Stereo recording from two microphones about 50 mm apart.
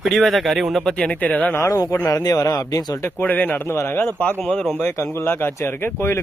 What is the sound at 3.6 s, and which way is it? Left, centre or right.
Speech, left.